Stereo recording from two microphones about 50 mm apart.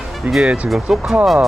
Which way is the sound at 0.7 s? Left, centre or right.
Centre.